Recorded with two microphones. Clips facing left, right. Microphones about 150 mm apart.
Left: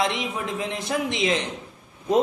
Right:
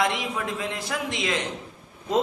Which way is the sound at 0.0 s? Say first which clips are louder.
Even; 20° left (ahead or behind).